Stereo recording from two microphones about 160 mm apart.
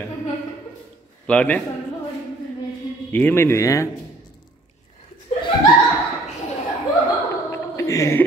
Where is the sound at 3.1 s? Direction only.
15° left (ahead or behind).